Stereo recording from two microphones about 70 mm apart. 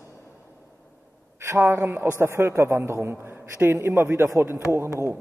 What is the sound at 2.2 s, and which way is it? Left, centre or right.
A man's voice, right.